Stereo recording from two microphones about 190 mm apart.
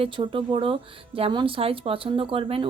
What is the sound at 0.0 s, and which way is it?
A woman's voice, 25° right (ahead or behind).